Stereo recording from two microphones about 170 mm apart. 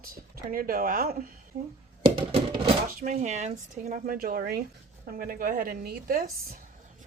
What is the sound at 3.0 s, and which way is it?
Speech, 45° right (ahead or behind).